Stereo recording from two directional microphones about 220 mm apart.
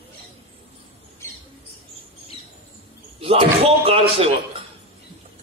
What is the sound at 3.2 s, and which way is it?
A man's voice, 25° right (ahead or behind).